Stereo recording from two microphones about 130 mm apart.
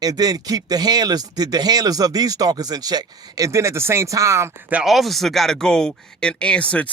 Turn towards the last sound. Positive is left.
turn(degrees=10)  # may be behind; listen again after turning